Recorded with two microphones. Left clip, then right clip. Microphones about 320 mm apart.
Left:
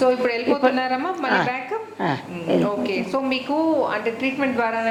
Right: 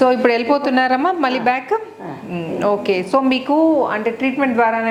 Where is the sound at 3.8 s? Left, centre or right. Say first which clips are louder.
Right 4 dB; right.